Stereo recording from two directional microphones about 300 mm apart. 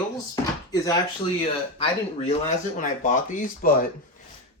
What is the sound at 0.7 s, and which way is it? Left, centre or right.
Speech, centre.